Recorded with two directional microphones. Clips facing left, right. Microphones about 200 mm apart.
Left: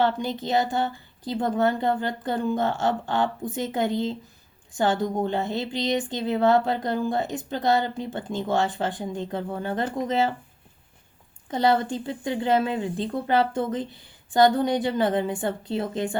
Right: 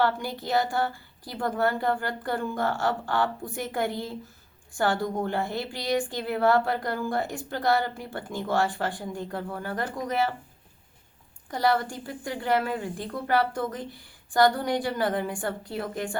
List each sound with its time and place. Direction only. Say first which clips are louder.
0.0 s speech: left 2 dB; 20° left (ahead or behind)
11.5 s speech: left 3 dB; 20° left (ahead or behind)